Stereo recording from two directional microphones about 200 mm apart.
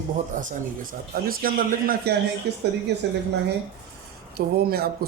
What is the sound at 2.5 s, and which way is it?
Speech, 60° right (ahead or behind).